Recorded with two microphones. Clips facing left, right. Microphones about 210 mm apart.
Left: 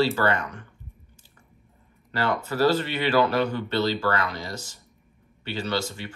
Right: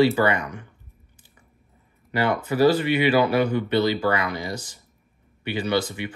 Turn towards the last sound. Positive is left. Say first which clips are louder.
# right 4 dB
turn(degrees=-15)  # may be behind; listen again after turning